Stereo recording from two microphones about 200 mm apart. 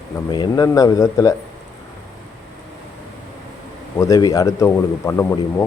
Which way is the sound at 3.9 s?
15° left (ahead or behind).